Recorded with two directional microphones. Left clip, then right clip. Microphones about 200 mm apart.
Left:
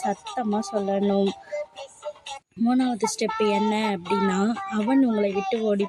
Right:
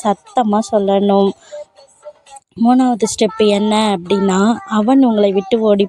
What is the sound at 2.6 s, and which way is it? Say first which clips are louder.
A woman's voice: right 11 dB; 35° right (ahead or behind).